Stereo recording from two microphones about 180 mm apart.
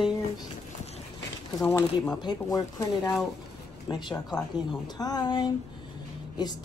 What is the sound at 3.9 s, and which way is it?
Speech, 20° left (ahead or behind).